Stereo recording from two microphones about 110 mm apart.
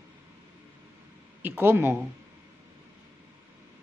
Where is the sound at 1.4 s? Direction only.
20° right (ahead or behind).